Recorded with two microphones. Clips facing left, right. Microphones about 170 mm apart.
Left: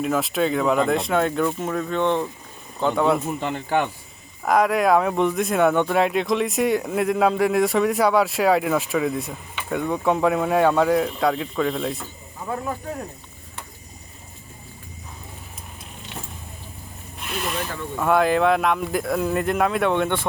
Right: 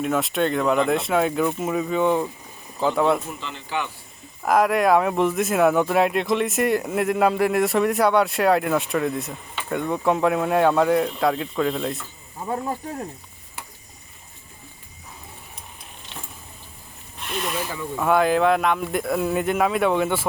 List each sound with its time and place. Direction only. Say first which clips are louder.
0.0 s speech: even; centre (ahead or behind)
3.4 s speech: left 7 dB; 50° left (ahead or behind)
4.4 s speech: even; centre (ahead or behind)
17.3 s speech: even; centre (ahead or behind)